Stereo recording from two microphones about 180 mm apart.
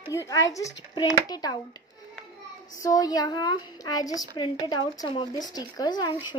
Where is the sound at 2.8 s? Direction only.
20° left (ahead or behind).